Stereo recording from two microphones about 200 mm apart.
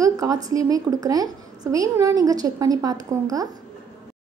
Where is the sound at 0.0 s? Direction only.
15° right (ahead or behind).